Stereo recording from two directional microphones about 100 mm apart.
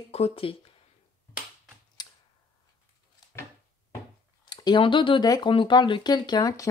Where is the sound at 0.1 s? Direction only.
75° left (ahead or behind).